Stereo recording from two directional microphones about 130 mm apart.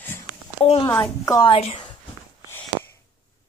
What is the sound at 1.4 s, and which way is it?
Speech, 45° left (ahead or behind).